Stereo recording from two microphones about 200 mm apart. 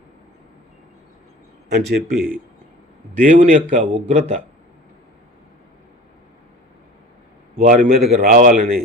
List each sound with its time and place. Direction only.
1.7 s a man's voice: 55° right (ahead or behind); by 4.4 s 35° right (ahead or behind)
7.7 s a man's voice: 45° right (ahead or behind)